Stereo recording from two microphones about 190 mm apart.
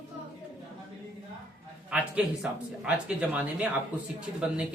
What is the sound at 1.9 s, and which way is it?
Speech, 5° right (ahead or behind).